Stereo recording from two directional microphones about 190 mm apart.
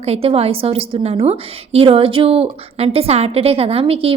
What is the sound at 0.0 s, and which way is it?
A woman's voice, 30° right (ahead or behind).